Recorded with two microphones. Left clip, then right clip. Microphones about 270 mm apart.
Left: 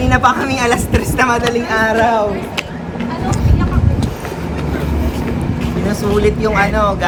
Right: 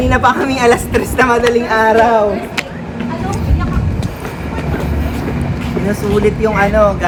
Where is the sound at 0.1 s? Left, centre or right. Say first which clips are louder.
Left 1 dB; centre.